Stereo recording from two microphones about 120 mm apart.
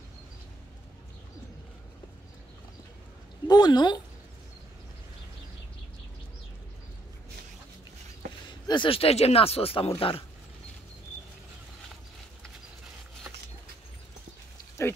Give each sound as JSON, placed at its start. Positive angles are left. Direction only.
{"t": 3.4, "sound": "speech", "side_deg": 35}
{"t": 8.5, "sound": "speech", "side_deg": 40}